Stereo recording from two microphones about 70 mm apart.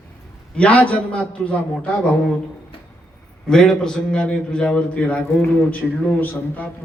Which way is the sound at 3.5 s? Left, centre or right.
Centre.